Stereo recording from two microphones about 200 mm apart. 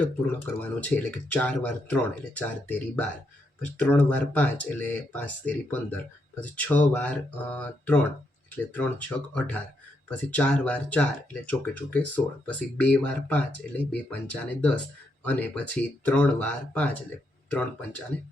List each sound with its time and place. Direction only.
0.8 s speech: 10° left (ahead or behind)